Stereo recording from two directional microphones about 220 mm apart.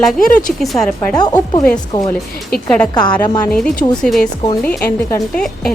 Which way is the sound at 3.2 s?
20° left (ahead or behind).